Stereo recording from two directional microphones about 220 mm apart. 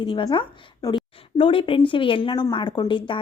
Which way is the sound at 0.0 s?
25° left (ahead or behind).